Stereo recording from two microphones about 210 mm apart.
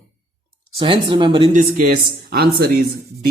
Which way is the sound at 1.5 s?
45° right (ahead or behind).